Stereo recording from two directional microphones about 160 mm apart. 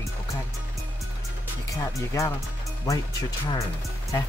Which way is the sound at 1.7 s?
20° left (ahead or behind).